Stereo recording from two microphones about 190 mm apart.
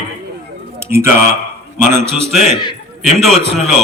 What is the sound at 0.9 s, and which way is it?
Speech, 15° right (ahead or behind).